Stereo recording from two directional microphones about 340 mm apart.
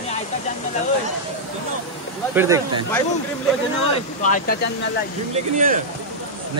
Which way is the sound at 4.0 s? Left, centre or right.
Left.